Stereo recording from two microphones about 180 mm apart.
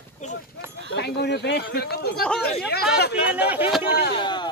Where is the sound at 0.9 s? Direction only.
70° left (ahead or behind).